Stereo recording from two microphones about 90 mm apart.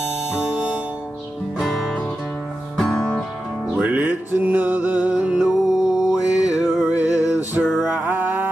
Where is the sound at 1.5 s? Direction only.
Centre (ahead or behind).